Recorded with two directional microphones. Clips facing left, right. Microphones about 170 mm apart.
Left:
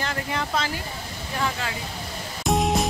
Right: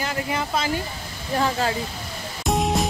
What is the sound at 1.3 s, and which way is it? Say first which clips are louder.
Speech: right 6 dB; 35° right (ahead or behind).